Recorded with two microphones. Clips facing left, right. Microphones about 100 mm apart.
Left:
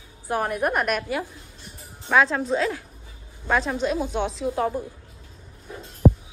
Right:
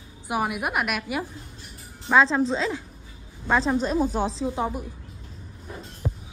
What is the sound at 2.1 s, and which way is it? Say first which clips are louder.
Speech: right 1 dB; 25° right (ahead or behind).